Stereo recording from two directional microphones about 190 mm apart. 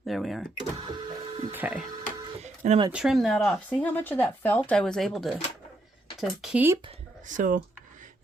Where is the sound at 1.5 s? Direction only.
5° right (ahead or behind).